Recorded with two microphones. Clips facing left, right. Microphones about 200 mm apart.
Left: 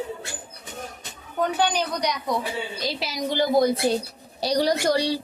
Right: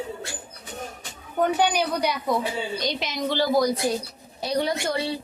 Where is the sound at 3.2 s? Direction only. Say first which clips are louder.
Left 2 dB; 20° left (ahead or behind).